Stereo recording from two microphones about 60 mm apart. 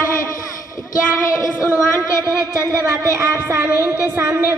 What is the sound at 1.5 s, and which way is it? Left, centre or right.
Speech, right.